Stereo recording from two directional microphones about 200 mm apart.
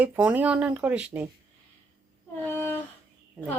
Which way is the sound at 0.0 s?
10° right (ahead or behind).